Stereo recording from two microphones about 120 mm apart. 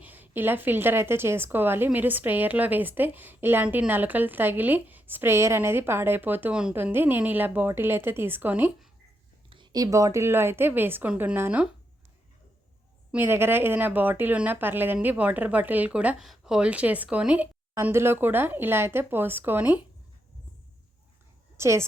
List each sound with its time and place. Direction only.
0.0 s a woman's voice: 15° right (ahead or behind)
9.5 s a woman's voice: 35° right (ahead or behind); by 11.7 s 15° right (ahead or behind)
13.1 s a woman's voice: 15° right (ahead or behind)
21.6 s a woman's voice: 25° right (ahead or behind)